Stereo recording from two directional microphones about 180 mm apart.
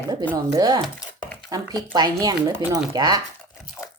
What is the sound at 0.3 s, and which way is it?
Speech, 20° right (ahead or behind).